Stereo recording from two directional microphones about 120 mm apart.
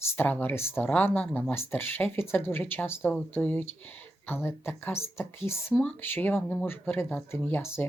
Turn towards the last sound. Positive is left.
turn(degrees=20)  # may be behind; listen again after turning